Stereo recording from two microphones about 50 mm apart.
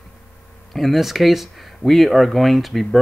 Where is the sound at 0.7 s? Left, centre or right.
Centre.